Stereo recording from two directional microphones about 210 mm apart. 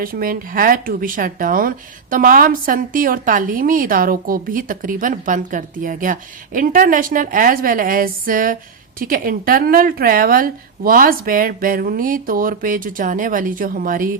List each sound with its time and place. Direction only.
0.0 s speech: 45° right (ahead or behind)